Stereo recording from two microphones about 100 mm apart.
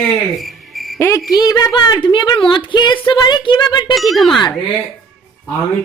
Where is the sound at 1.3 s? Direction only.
40° left (ahead or behind).